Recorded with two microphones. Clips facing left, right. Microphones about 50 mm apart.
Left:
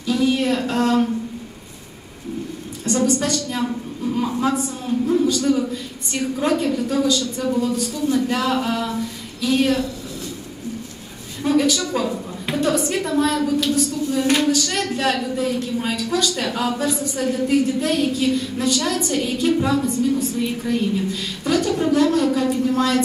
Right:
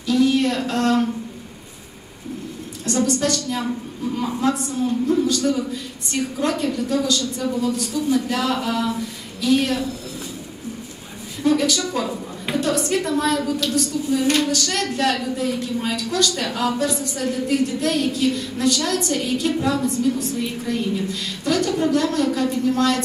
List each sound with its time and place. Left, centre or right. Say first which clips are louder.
0.0 s a woman's voice: right 2 dB; centre
2.8 s a woman's voice: left 1 dB; centre
11.4 s a woman's voice: left 1 dB; centre